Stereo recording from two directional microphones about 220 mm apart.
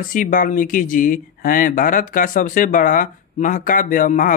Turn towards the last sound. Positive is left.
turn(degrees=35)  # may be behind; listen again after turning